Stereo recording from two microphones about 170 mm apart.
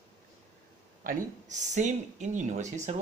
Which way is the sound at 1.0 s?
45° right (ahead or behind).